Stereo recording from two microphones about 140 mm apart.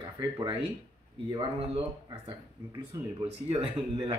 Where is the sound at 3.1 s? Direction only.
35° right (ahead or behind).